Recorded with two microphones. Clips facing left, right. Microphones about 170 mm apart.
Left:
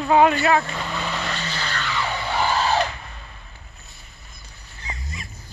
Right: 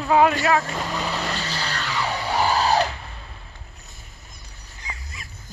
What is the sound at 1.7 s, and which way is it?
Vehicle, 35° right (ahead or behind).